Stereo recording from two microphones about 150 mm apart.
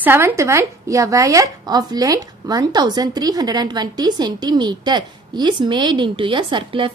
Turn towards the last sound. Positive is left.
turn(degrees=-35)  # may be behind; listen again after turning